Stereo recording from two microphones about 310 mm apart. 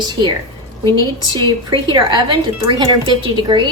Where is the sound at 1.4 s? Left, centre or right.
Centre.